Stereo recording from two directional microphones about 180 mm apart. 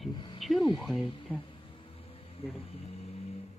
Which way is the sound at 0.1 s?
25° left (ahead or behind).